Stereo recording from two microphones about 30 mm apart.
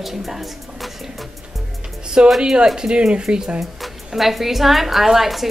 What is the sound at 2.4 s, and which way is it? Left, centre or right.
Speech, right.